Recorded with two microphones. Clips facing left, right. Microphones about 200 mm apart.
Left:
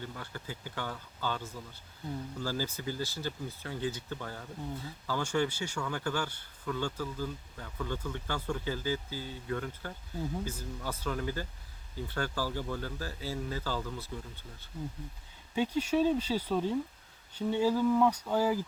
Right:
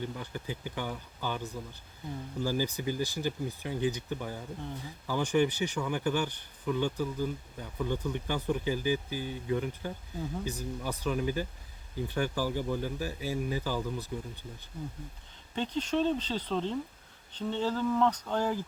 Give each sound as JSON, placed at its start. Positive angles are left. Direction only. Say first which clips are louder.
{"t": 0.0, "sound": "speech", "louder": "right 5 dB", "side_deg": -15}
{"t": 15.5, "sound": "speech", "louder": "left 2 dB", "side_deg": 10}